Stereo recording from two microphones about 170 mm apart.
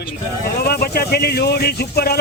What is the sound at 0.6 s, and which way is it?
Speech, 65° left (ahead or behind).